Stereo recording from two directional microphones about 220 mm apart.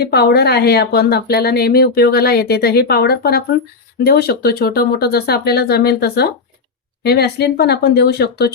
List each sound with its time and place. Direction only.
0.0 s speech: 45° left (ahead or behind)